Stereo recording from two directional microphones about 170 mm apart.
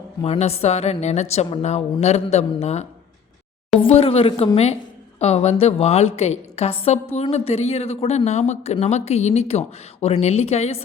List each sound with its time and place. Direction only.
0.3 s a woman's voice: 40° left (ahead or behind)
3.8 s a woman's voice: 35° left (ahead or behind)